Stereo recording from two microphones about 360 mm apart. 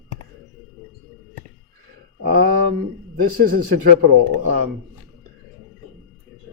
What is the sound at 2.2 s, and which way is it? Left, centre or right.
Speech, right.